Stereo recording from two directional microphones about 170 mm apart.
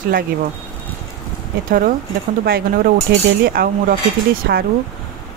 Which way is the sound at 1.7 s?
55° right (ahead or behind).